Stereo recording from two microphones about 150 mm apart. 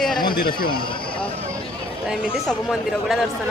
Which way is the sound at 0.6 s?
80° left.